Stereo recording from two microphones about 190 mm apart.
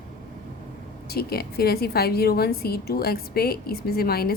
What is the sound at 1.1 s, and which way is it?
A woman's voice, 55° left (ahead or behind).